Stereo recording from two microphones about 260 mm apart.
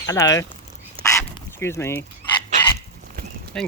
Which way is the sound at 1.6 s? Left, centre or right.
Centre.